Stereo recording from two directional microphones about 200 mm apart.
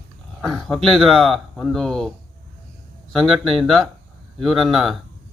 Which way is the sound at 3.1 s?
Centre (ahead or behind).